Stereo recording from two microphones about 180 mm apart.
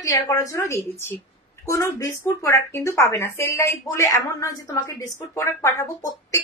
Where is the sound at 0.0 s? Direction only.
20° left (ahead or behind).